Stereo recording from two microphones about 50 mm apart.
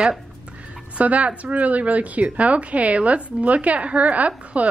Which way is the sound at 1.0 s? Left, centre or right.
Right.